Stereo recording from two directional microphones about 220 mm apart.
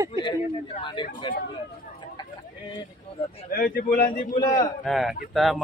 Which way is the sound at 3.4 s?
40° left (ahead or behind).